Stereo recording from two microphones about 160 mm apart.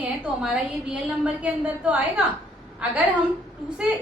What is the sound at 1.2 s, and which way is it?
A woman's voice, 5° right (ahead or behind).